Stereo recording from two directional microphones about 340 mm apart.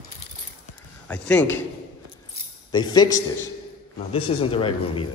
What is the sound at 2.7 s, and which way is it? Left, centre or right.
Speech, centre.